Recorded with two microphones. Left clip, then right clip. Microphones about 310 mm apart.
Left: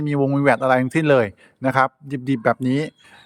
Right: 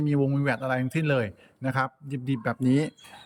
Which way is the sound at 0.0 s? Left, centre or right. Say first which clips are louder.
Left 8 dB; centre.